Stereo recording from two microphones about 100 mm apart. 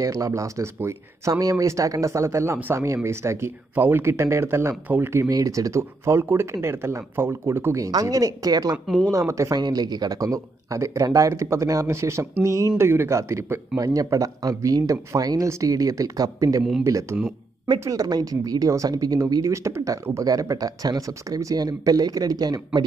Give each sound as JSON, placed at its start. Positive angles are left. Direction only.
{"t": 0.0, "sound": "speech", "side_deg": -35}
{"t": 9.6, "sound": "speech", "side_deg": -45}